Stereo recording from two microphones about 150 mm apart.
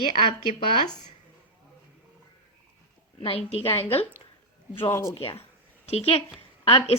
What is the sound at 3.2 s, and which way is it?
Speech, 40° left (ahead or behind).